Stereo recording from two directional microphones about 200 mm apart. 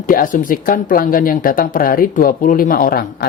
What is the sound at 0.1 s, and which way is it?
Speech, 45° left (ahead or behind).